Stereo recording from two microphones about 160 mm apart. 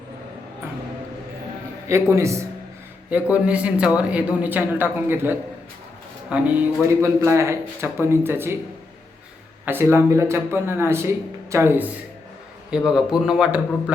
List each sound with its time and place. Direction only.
1.9 s speech: 20° right (ahead or behind)
9.6 s speech: 15° right (ahead or behind)
12.7 s a man's voice: 5° right (ahead or behind)